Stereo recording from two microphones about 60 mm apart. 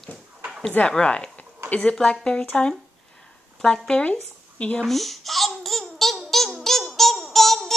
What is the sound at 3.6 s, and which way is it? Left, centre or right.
Speech, centre.